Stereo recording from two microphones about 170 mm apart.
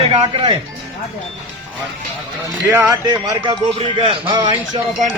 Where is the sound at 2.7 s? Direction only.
20° right (ahead or behind).